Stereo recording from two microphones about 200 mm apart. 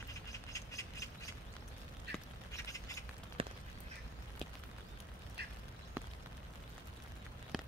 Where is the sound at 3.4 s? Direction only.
30° right (ahead or behind).